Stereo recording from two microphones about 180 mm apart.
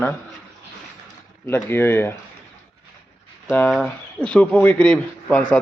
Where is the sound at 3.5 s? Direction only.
5° left (ahead or behind).